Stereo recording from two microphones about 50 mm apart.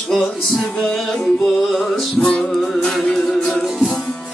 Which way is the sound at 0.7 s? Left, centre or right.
Centre.